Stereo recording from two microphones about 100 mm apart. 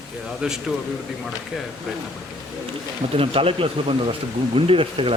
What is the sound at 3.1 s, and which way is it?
Speech, 65° right (ahead or behind).